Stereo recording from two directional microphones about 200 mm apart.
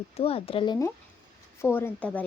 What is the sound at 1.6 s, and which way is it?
Speech, 10° left (ahead or behind).